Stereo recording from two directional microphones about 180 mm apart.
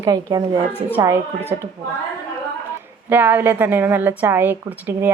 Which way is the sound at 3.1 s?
10° right (ahead or behind).